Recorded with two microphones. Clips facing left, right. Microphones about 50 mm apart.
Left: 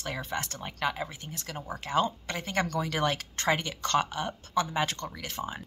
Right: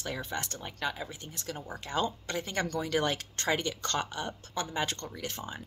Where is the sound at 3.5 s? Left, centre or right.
Left.